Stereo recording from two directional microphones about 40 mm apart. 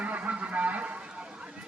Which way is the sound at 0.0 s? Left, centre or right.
Right.